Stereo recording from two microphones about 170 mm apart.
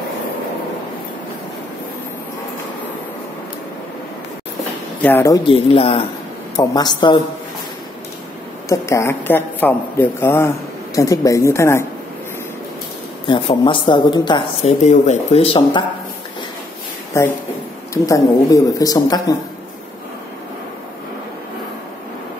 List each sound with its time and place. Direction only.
5.0 s speech: 15° left (ahead or behind)
5.5 s speech: 35° left (ahead or behind)
6.5 s speech: 20° left (ahead or behind)
8.6 s speech: 15° left (ahead or behind)
13.3 s speech: 30° left (ahead or behind)
14.8 s speech: 45° left (ahead or behind)
17.1 s speech: 15° left (ahead or behind)